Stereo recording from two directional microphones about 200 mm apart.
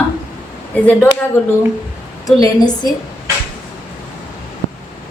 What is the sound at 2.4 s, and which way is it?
Speech, 20° left (ahead or behind).